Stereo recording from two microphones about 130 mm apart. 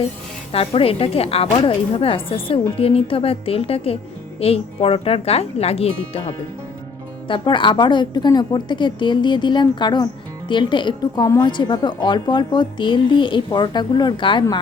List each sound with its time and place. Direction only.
0.5 s a woman's voice: 45° left (ahead or behind)
7.3 s speech: 40° left (ahead or behind)